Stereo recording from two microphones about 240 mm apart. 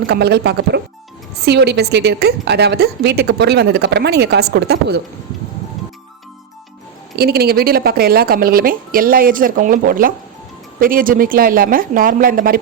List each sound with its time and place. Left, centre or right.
0.1 s a woman's voice: right
7.2 s speech: right